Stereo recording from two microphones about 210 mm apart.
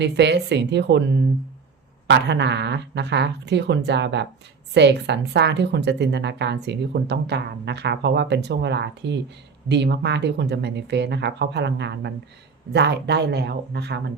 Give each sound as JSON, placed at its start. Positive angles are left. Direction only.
{"t": 0.0, "sound": "speech", "side_deg": -55}
{"t": 2.0, "sound": "speech", "side_deg": -55}